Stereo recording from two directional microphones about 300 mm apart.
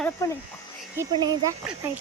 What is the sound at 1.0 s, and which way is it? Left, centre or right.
Speech, centre.